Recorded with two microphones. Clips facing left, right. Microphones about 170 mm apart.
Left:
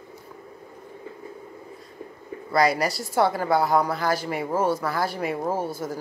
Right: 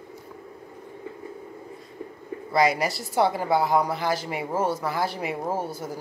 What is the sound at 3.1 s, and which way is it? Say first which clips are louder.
Speech: left 1 dB; 20° right (ahead or behind).